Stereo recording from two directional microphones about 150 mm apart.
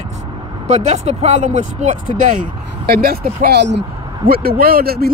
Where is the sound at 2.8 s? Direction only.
85° right.